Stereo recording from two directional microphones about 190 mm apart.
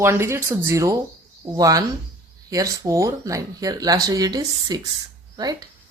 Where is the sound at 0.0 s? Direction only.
15° right (ahead or behind).